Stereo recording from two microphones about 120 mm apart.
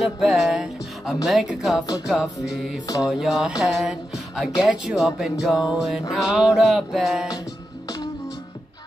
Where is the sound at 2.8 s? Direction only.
35° left (ahead or behind).